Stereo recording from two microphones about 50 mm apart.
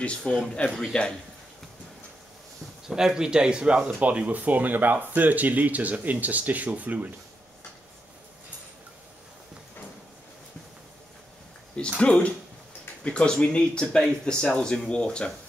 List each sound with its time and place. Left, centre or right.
0.0 s speech: left
0.3 s speech: centre
2.9 s speech: centre; by 7.2 s right
11.7 s speech: left